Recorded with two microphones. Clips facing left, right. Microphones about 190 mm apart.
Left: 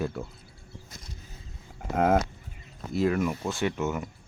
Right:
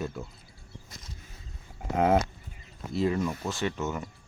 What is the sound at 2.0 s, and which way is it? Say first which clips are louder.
Speech: even; 5° right (ahead or behind).